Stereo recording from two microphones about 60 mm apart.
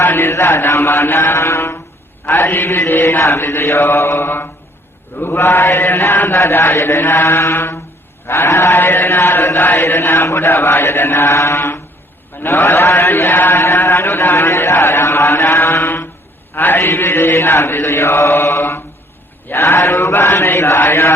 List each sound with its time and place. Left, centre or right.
0.0 s mantra: left
2.5 s chant: left
6.2 s mantra: left
6.8 s chant: left
11.3 s mantra: left
12.4 s chant: left
13.8 s a sound: left
16.6 s chant: left